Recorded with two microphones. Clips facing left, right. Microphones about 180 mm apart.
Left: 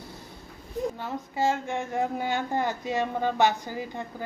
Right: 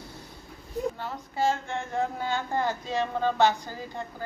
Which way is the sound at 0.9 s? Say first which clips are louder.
Left 1 dB; 15° left (ahead or behind).